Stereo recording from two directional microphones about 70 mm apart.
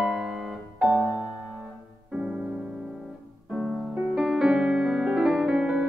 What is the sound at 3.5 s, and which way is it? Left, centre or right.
Music, centre.